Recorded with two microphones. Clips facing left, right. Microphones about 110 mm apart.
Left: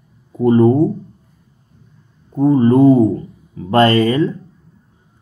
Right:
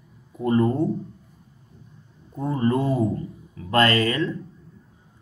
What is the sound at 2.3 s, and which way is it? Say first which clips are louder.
Speech: left 12 dB; 30° left (ahead or behind).